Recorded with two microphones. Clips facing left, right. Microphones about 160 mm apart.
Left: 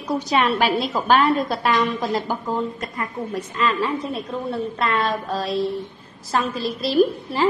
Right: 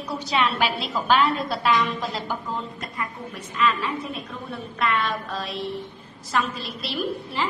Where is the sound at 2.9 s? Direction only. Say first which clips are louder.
Left 6 dB; 40° left (ahead or behind).